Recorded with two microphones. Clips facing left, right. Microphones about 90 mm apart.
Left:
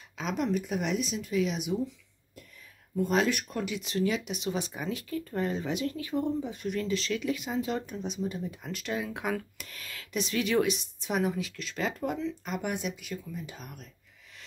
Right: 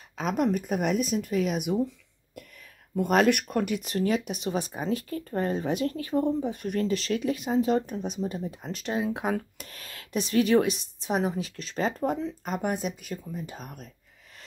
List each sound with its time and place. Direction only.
0.2 s speech: 50° right (ahead or behind)
3.0 s speech: 60° right (ahead or behind); by 13.8 s 45° right (ahead or behind)